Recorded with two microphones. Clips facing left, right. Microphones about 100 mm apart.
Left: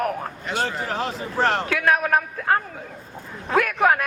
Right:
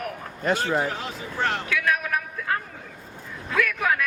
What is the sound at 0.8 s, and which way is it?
A woman's voice, 35° left (ahead or behind).